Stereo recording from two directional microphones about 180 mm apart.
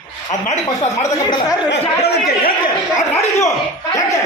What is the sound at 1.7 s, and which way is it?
Speech, 65° left (ahead or behind).